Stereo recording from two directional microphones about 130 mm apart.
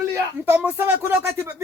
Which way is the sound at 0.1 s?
15° right (ahead or behind).